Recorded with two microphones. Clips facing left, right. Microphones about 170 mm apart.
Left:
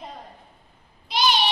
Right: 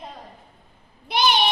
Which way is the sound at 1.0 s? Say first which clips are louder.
Right 2 dB; 60° right (ahead or behind).